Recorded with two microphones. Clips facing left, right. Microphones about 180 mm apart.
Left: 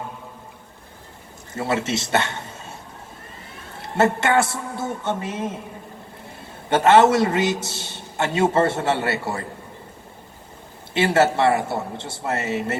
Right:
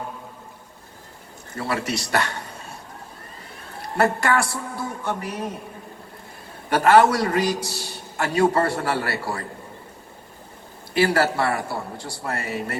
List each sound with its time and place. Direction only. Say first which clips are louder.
1.5 s a man's voice: left 3 dB; 25° left (ahead or behind)
3.8 s a man's voice: left 2 dB; 25° left (ahead or behind)
6.7 s a man's voice: left 1 dB; 25° left (ahead or behind)
10.9 s a man's voice: left 2 dB; 25° left (ahead or behind)